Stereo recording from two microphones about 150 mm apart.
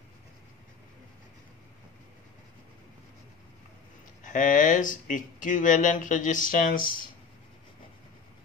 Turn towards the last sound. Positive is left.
turn(degrees=65)  # may be behind; listen again after turning